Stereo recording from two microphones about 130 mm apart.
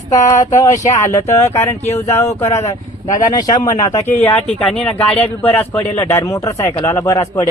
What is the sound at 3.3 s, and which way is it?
Speech, 30° left (ahead or behind).